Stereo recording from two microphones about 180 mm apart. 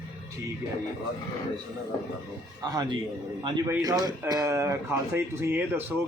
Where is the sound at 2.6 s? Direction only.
20° right (ahead or behind).